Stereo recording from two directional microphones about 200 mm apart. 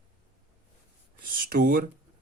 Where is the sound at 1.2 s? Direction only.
45° right (ahead or behind).